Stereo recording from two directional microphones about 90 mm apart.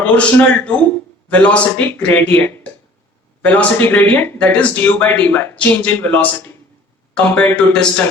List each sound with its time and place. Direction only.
0.0 s a man's voice: 15° left (ahead or behind)